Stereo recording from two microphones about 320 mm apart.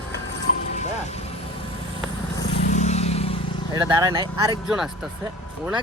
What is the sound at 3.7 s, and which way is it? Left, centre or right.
Speech, centre.